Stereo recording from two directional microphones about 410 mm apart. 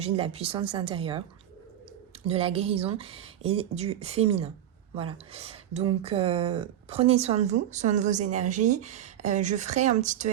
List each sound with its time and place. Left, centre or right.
0.0 s speech: centre
2.2 s speech: centre